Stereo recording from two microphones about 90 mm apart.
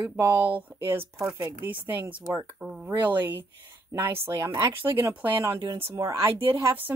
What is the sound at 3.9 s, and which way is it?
Speech, 30° right (ahead or behind).